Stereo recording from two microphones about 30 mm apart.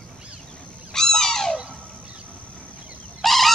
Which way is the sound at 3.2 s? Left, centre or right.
Centre.